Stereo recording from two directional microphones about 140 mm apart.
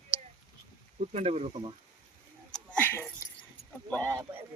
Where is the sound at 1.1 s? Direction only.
50° right (ahead or behind).